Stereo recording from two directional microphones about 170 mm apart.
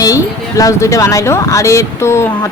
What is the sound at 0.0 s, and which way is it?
Speech, 20° left (ahead or behind).